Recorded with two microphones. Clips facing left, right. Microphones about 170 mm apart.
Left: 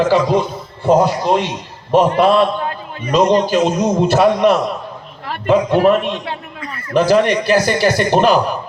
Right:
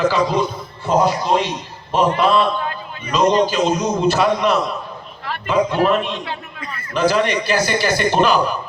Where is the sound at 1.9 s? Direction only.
55° left (ahead or behind).